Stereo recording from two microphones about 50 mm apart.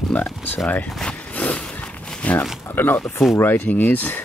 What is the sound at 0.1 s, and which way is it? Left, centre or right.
Speech, left.